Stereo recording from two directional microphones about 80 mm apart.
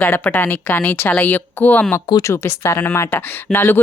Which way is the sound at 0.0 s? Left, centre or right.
Left.